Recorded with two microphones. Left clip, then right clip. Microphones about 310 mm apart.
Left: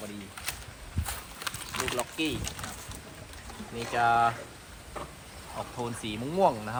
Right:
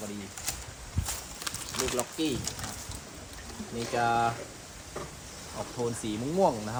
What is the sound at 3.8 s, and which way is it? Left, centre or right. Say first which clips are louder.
Speech: left 3 dB; centre.